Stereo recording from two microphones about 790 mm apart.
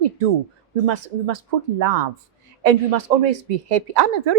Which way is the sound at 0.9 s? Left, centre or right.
Right.